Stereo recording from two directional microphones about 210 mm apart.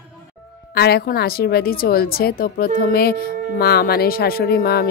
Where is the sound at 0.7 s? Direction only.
50° left (ahead or behind).